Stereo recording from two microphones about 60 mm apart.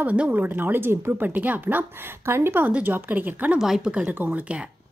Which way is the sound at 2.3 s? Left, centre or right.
Right.